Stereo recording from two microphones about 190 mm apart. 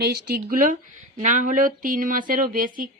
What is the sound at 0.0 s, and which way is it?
A woman's voice, 50° right (ahead or behind).